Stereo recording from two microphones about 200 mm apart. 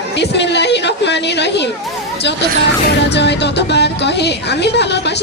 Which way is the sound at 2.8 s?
60° left (ahead or behind).